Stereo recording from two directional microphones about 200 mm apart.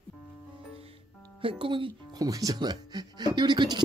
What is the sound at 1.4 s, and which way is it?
Music, 25° right (ahead or behind).